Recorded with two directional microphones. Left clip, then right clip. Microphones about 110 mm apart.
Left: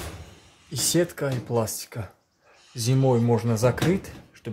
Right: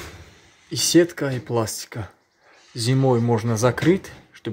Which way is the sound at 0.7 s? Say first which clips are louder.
Right 7 dB; 25° right (ahead or behind).